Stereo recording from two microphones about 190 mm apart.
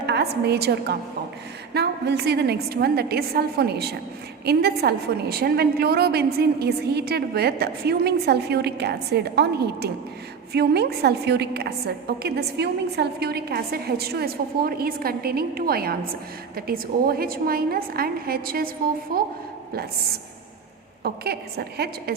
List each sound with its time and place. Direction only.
0.0 s a woman's voice: 60° right (ahead or behind)
21.0 s a woman's voice: 55° right (ahead or behind)